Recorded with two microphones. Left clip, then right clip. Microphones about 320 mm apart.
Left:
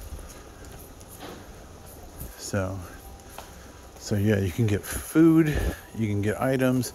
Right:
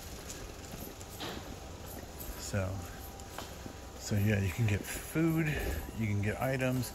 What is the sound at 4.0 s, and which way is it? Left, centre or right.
Speech, centre.